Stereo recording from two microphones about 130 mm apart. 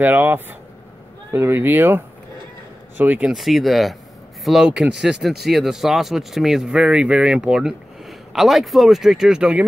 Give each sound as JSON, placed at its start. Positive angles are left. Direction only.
{"t": 0.0, "sound": "speech", "side_deg": -15}
{"t": 3.3, "sound": "speech", "side_deg": 0}